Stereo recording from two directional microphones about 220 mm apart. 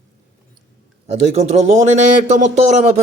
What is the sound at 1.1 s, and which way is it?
A man's voice, 30° right (ahead or behind).